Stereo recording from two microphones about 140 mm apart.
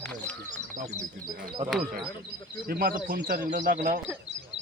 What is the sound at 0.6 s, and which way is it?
Speech, 55° right (ahead or behind).